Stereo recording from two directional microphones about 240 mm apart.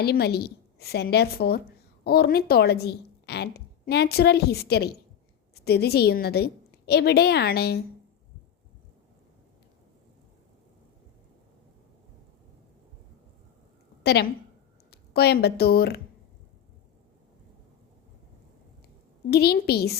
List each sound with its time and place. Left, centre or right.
0.0 s a woman's voice: left
14.0 s a woman's voice: left
19.3 s a woman's voice: left